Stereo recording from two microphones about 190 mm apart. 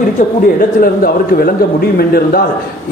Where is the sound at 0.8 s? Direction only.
50° left (ahead or behind).